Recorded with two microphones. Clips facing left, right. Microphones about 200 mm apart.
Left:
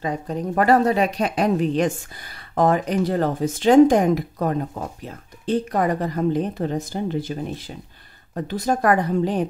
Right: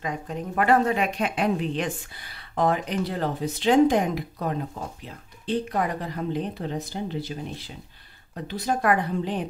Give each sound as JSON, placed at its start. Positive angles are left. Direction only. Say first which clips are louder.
{"t": 0.0, "sound": "a woman's voice", "louder": "left 5 dB", "side_deg": 35}